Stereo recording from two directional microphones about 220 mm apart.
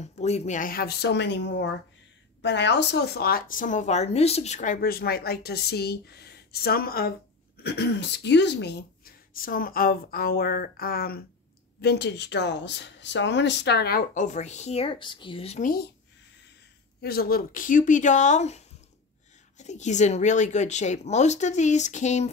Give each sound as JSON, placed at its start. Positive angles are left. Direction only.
{"t": 0.0, "sound": "speech", "side_deg": 30}
{"t": 17.0, "sound": "speech", "side_deg": 45}
{"t": 19.6, "sound": "speech", "side_deg": 30}